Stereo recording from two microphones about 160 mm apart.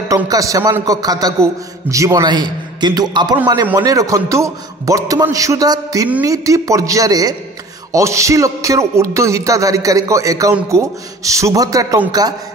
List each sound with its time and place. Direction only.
0.1 s a man's voice: 20° right (ahead or behind)